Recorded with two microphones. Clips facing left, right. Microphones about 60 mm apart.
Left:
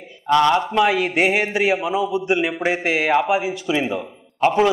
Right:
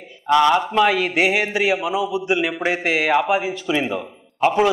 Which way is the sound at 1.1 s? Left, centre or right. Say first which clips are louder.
Even; left.